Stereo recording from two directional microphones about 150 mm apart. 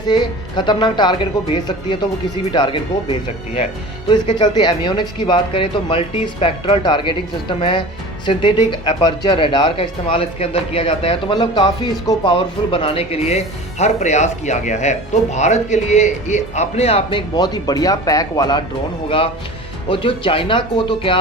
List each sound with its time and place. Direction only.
0.1 s speech: 30° left (ahead or behind)
4.1 s speech: 30° left (ahead or behind)
19.0 s speech: 40° left (ahead or behind)